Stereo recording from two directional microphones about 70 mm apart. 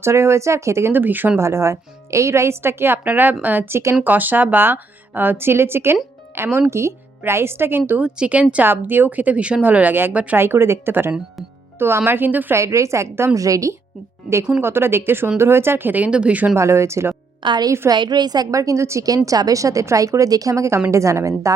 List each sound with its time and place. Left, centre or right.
0.0 s speech: right
1.4 s speech: right
4.0 s speech: right
8.0 s a woman's voice: centre
8.6 s a woman's voice: right
12.5 s a woman's voice: right
14.6 s a woman's voice: right; by 16.5 s centre
16.6 s a woman's voice: right
17.4 s a woman's voice: right
19.0 s a woman's voice: right